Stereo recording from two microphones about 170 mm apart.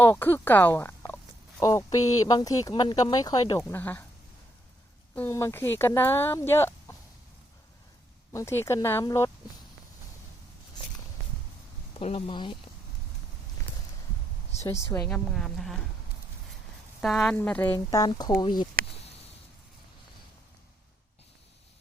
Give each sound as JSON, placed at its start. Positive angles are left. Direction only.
{"t": 0.0, "sound": "speech", "side_deg": 10}
{"t": 5.1, "sound": "speech", "side_deg": 15}
{"t": 8.3, "sound": "speech", "side_deg": 15}
{"t": 11.9, "sound": "speech", "side_deg": 35}
{"t": 14.6, "sound": "speech", "side_deg": 20}
{"t": 15.1, "sound": "a woman's voice", "side_deg": 0}
{"t": 17.0, "sound": "speech", "side_deg": 0}